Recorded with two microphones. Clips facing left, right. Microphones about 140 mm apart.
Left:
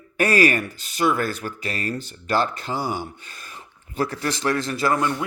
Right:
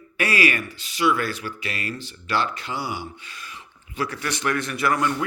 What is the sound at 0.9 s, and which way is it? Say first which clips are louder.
Speech: left 1 dB; 45° left (ahead or behind).